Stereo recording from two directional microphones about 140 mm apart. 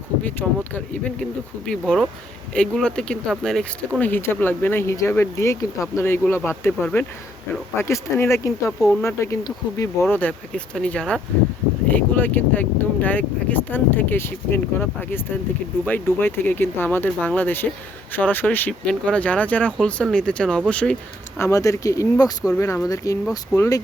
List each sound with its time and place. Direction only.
0.2 s speech: 10° left (ahead or behind)
21.3 s speech: 20° left (ahead or behind)